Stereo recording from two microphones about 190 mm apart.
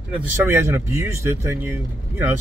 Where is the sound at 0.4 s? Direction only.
15° right (ahead or behind).